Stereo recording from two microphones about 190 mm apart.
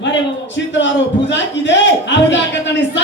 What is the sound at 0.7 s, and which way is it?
A man's voice, 70° left (ahead or behind).